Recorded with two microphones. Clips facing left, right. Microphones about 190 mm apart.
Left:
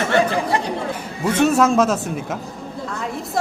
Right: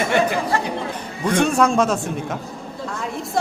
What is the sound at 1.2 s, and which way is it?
Speech, 5° left (ahead or behind).